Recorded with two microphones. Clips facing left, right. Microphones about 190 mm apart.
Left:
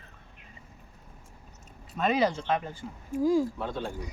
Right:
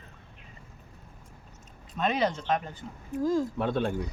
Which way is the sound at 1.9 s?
Centre (ahead or behind).